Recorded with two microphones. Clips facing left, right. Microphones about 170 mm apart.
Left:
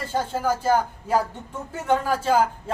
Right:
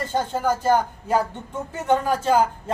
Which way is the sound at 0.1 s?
5° left (ahead or behind).